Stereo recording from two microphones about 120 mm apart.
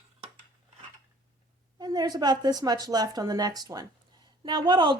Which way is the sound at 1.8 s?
35° right (ahead or behind).